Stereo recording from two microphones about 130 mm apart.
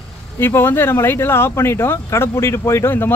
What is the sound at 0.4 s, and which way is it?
Speech, 15° left (ahead or behind).